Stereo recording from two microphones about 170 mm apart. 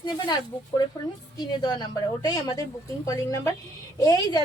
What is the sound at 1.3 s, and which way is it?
A woman's voice, 25° left (ahead or behind).